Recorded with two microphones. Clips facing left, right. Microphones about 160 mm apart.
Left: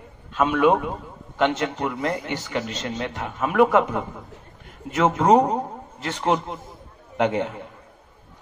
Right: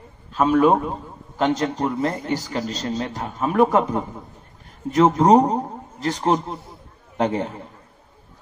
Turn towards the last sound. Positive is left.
turn(degrees=-35)  # may be behind; listen again after turning